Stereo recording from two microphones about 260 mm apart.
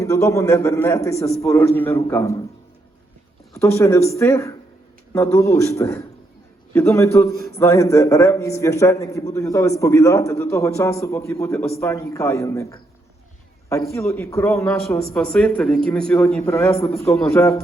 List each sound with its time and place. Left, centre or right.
0.0 s a man's voice: centre
3.5 s a man's voice: centre
16.7 s a man's voice: left
17.2 s a man's voice: centre